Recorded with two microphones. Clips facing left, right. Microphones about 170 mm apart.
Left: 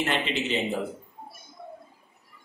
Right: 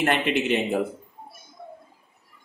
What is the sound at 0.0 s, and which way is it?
Speech, 55° right (ahead or behind).